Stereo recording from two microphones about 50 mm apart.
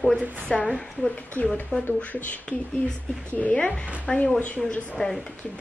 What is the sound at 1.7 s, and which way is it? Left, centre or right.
Speech, centre.